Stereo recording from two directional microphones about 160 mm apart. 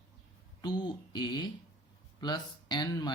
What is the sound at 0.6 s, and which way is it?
Speech, 30° left (ahead or behind).